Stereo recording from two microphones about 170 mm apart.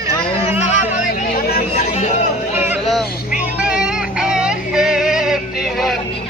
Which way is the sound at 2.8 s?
5° right (ahead or behind).